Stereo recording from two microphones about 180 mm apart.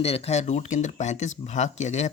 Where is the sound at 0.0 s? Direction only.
35° left (ahead or behind).